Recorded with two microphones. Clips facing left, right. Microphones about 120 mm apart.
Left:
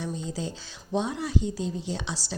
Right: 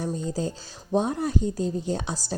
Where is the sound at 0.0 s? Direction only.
45° right (ahead or behind).